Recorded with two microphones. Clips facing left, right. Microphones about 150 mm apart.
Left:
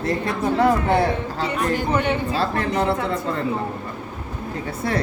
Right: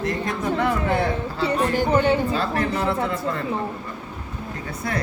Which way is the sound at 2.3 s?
35° left (ahead or behind).